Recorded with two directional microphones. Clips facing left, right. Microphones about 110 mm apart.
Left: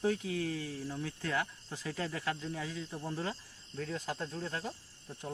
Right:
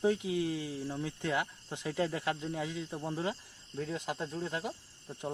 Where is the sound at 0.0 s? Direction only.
20° right (ahead or behind).